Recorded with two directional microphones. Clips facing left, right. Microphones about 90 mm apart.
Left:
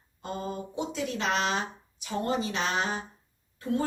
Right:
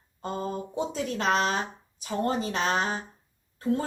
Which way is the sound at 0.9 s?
40° right (ahead or behind).